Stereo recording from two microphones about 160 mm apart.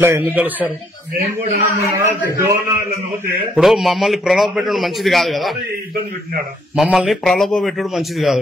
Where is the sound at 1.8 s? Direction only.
20° right (ahead or behind).